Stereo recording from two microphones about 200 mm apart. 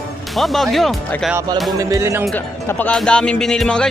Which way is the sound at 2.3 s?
10° left (ahead or behind).